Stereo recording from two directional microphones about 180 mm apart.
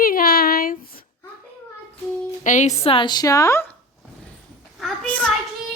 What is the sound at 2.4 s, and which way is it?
A woman's voice, 45° left (ahead or behind).